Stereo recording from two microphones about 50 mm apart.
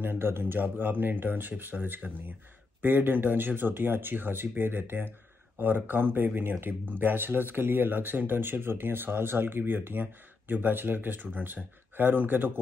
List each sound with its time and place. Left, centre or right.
0.0 s speech: right